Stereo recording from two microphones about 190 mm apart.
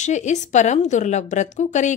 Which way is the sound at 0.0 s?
40° left (ahead or behind).